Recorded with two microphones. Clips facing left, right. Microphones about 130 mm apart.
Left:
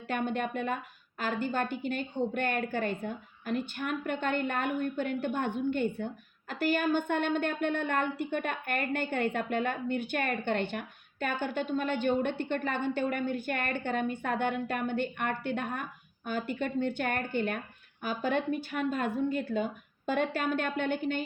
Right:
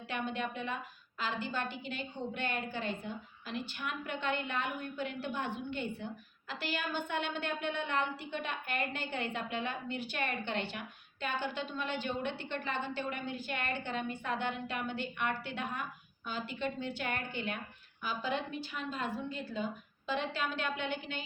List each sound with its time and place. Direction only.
0.1 s a woman's voice: 50° left (ahead or behind)